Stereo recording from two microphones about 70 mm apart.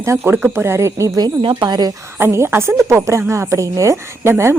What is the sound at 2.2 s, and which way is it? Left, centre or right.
A woman's voice, right.